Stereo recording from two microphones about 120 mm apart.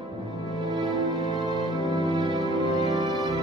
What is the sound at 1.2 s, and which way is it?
Music, 35° right (ahead or behind).